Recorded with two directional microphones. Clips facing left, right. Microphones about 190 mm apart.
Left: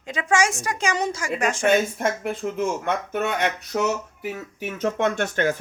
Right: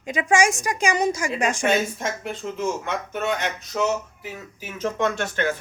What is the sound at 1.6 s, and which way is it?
Speech, 55° left (ahead or behind).